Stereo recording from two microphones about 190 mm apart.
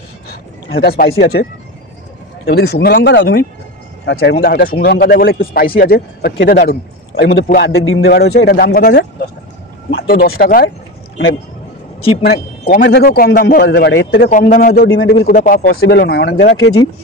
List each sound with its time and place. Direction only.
0.3 s a sound: 55° left (ahead or behind)
1.2 s speech: 55° left (ahead or behind)
7.7 s speech: 90° left; by 10.7 s 50° left (ahead or behind)
12.2 s speech: 55° left (ahead or behind)